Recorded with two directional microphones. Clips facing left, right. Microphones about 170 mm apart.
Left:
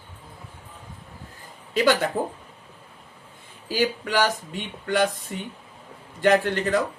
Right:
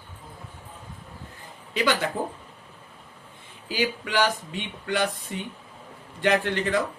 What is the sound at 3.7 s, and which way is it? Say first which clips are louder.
Speech: left 2 dB; 45° left (ahead or behind).